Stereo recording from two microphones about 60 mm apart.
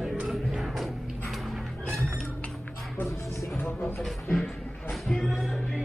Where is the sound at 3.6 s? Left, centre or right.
Left.